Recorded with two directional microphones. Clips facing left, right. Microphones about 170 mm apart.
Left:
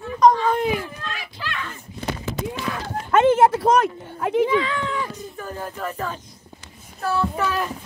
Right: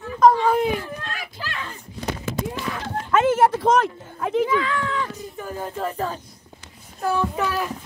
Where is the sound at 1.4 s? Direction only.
35° right (ahead or behind).